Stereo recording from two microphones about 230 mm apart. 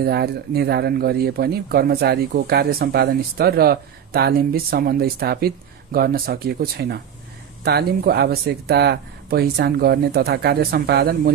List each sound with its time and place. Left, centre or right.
0.0 s speech: right